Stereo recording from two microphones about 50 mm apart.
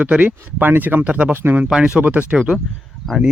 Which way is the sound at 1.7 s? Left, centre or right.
Centre.